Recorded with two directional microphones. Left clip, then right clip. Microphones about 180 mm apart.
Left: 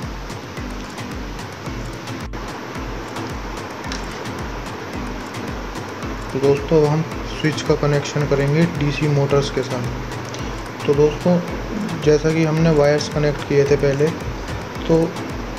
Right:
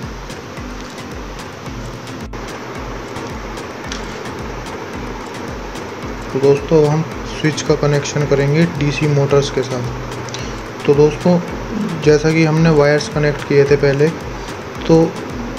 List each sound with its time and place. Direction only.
6.4 s speech: 5° right (ahead or behind)
10.9 s speech: 20° right (ahead or behind)
12.0 s speech: 15° right (ahead or behind)
14.9 s speech: 25° right (ahead or behind)